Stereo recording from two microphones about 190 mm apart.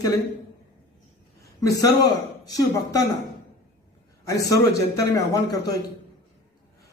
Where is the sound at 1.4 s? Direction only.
20° left (ahead or behind).